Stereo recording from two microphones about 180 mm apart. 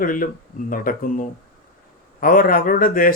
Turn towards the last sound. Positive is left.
turn(degrees=50)  # may be behind; listen again after turning